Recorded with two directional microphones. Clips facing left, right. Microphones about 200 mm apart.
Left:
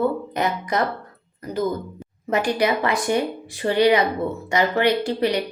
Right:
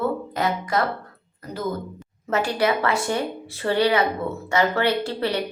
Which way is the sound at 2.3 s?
15° left (ahead or behind).